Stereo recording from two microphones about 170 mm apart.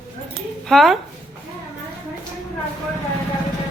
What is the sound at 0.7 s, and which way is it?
Speech, centre (ahead or behind).